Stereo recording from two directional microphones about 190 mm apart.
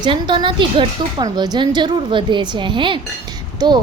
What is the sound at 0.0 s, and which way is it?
A woman's voice, 25° right (ahead or behind).